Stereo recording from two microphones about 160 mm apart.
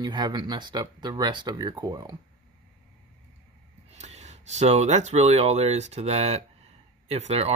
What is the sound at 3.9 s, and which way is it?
Speech, 45° right (ahead or behind).